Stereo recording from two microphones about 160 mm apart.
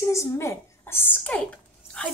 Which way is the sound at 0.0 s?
20° left (ahead or behind).